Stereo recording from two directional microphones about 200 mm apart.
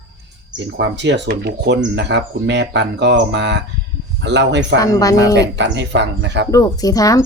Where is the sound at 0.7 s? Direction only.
60° right (ahead or behind).